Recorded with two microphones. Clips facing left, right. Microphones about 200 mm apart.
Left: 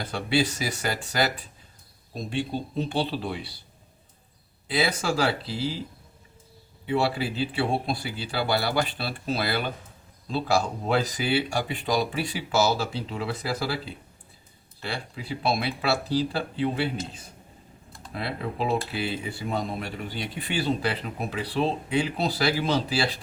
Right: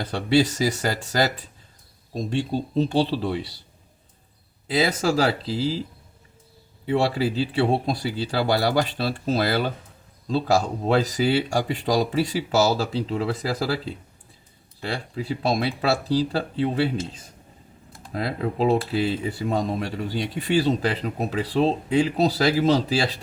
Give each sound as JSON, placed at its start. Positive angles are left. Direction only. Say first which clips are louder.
{"t": 0.0, "sound": "speech", "louder": "right 5 dB", "side_deg": -40}
{"t": 4.7, "sound": "speech", "louder": "right 4 dB", "side_deg": -40}
{"t": 6.8, "sound": "speech", "louder": "right 4 dB", "side_deg": -40}
{"t": 18.1, "sound": "speech", "louder": "right 5 dB", "side_deg": -40}